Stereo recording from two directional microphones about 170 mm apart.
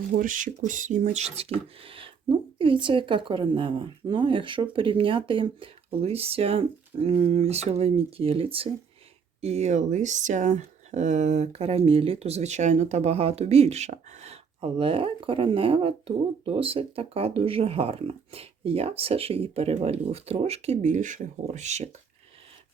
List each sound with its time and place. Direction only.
0.2 s speech: 50° right (ahead or behind)